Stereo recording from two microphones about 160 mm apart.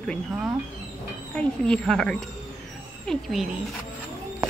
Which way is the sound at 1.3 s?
5° left (ahead or behind).